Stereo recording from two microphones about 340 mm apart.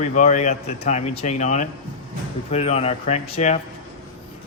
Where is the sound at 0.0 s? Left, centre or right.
Left.